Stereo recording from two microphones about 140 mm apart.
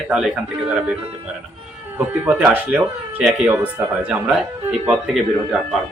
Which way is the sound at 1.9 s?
10° right (ahead or behind).